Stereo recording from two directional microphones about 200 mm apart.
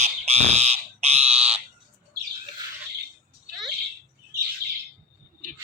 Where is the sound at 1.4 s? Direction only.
30° right (ahead or behind).